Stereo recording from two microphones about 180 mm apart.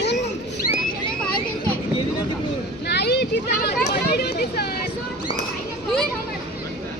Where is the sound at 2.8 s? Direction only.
65° left (ahead or behind).